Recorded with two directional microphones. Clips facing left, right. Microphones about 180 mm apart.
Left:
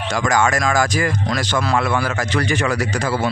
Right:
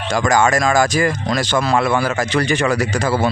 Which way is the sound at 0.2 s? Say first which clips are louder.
Right 3 dB; 25° right (ahead or behind).